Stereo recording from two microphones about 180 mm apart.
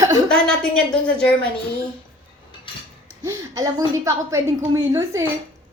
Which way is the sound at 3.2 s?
20° right (ahead or behind).